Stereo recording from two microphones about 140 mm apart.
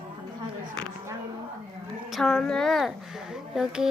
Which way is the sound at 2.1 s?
5° left (ahead or behind).